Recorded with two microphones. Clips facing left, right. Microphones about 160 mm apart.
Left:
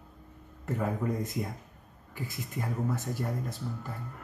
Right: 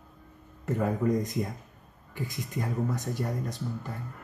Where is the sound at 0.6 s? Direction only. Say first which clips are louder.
Right 4 dB; 5° left (ahead or behind).